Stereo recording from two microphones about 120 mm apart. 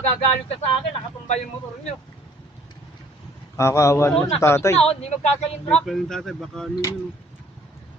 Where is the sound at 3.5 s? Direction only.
25° left (ahead or behind).